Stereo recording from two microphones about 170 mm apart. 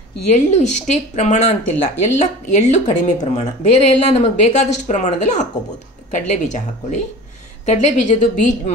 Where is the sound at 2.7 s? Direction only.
45° left (ahead or behind).